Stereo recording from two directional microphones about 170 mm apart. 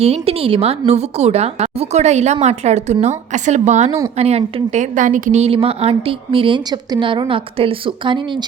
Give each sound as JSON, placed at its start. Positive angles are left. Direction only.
{"t": 0.0, "sound": "a woman's voice", "side_deg": -35}